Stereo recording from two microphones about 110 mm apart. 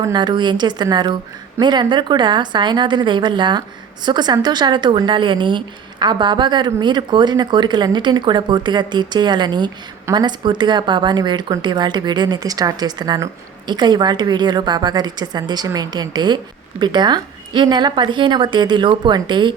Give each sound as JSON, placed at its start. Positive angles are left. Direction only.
{"t": 0.1, "sound": "a woman's voice", "side_deg": -40}